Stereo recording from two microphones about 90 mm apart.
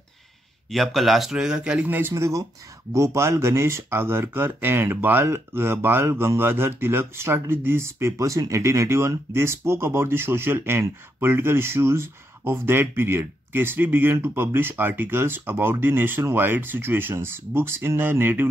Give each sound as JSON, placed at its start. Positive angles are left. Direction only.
{"t": 0.7, "sound": "speech", "side_deg": 0}
{"t": 2.0, "sound": "speech", "side_deg": -30}